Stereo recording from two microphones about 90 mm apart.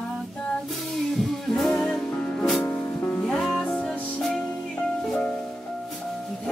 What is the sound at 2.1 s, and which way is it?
Music, 20° left (ahead or behind).